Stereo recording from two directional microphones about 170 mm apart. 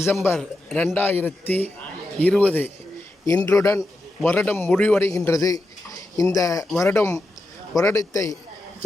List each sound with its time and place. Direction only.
0.0 s a man's voice: 15° left (ahead or behind)